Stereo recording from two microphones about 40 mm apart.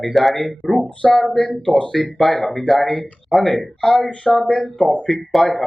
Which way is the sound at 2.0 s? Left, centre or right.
Centre.